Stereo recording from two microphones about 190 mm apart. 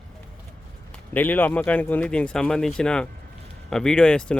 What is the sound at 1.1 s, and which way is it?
Speech, 10° left (ahead or behind).